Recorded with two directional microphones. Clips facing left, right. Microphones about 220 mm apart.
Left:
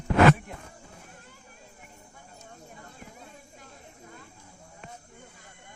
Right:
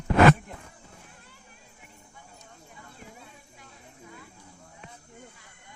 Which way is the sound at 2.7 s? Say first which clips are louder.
Left 1 dB; 45° left (ahead or behind).